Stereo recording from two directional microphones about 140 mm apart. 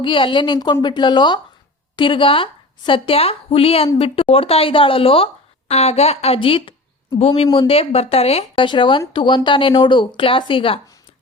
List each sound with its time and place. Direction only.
0.0 s speech: 35° left (ahead or behind)
7.4 s speech: 25° left (ahead or behind)
7.7 s speech: 45° left (ahead or behind)